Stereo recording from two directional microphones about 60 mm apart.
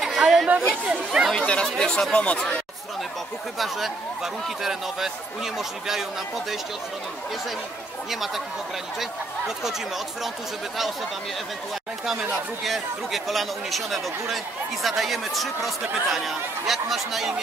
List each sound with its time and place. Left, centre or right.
0.0 s chatter: centre
0.8 s speech: centre
1.3 s speech: centre
2.1 s speech: left
3.5 s speech: centre
12.1 s speech: centre